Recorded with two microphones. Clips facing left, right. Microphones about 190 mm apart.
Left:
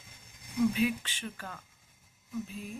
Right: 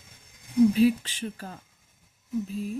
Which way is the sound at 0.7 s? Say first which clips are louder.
Right 9 dB; 35° right (ahead or behind).